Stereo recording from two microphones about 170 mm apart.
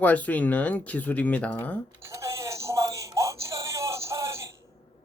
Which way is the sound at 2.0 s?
15° right (ahead or behind).